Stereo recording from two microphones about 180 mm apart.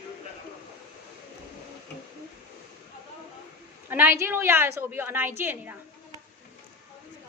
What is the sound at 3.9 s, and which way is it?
A woman's voice, 10° right (ahead or behind).